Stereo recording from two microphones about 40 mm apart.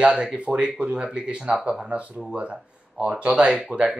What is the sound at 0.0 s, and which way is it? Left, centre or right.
Speech, centre.